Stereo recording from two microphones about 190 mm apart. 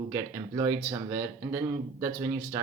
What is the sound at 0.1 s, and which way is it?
Speech, 15° right (ahead or behind).